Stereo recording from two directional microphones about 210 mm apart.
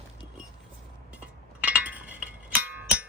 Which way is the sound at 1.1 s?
5° right (ahead or behind).